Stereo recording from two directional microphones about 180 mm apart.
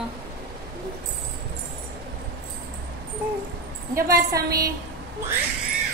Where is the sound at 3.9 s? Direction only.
15° right (ahead or behind).